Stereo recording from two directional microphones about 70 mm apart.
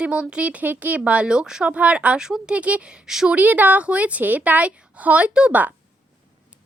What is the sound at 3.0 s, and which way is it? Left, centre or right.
Speech, centre.